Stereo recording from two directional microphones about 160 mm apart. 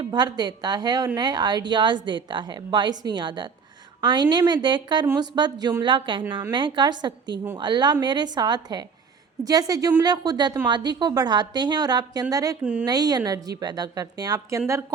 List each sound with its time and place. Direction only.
0.0 s a woman's voice: 25° right (ahead or behind)